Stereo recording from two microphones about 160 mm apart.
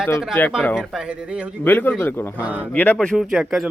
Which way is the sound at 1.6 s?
10° left (ahead or behind).